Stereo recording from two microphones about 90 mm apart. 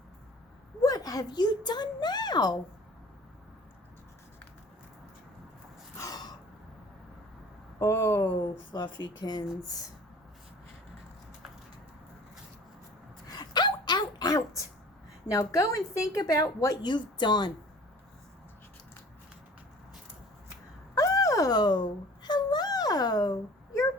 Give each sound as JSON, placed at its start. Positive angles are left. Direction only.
{"t": 0.8, "sound": "a woman's voice", "side_deg": 40}
{"t": 6.0, "sound": "snort", "side_deg": 45}
{"t": 7.8, "sound": "speech", "side_deg": 30}
{"t": 8.4, "sound": "speech", "side_deg": 60}
{"t": 13.2, "sound": "a sound", "side_deg": 50}
{"t": 15.3, "sound": "a woman's voice", "side_deg": 35}
{"t": 20.9, "sound": "a sound", "side_deg": 40}